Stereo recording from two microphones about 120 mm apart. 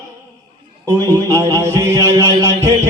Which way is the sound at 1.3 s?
25° right (ahead or behind).